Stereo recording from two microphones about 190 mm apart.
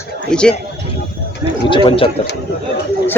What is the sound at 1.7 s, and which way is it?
Speech, 25° left (ahead or behind).